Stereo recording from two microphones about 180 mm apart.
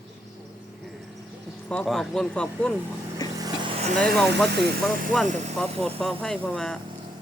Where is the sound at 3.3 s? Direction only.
20° right (ahead or behind).